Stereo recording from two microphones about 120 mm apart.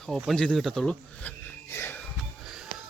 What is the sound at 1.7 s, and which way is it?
Music, 20° left (ahead or behind).